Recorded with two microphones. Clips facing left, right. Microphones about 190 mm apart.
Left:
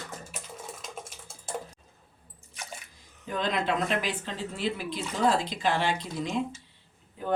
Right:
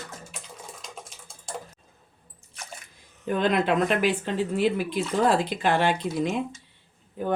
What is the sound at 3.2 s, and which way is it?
Speech, 55° right (ahead or behind).